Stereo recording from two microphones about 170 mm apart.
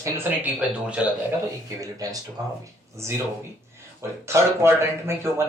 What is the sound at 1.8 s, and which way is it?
Speech, 20° right (ahead or behind).